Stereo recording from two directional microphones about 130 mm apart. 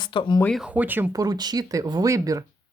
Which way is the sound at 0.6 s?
10° right (ahead or behind).